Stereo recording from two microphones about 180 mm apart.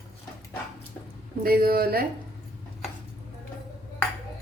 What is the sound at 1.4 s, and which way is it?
Speech, 55° right (ahead or behind).